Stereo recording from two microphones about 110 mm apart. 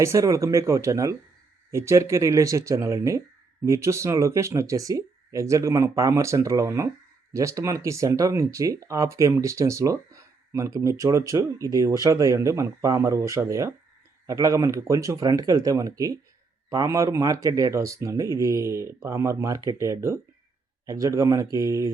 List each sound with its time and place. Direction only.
0.0 s speech: 30° right (ahead or behind)